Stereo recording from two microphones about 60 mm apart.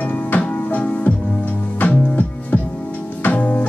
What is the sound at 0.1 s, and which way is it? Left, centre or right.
Music, left.